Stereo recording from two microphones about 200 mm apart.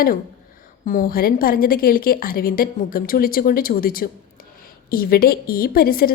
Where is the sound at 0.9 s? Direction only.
45° left (ahead or behind).